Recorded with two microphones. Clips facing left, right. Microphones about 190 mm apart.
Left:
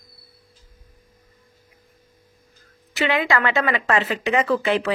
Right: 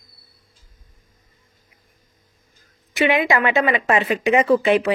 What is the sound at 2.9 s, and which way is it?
Speech, 15° right (ahead or behind).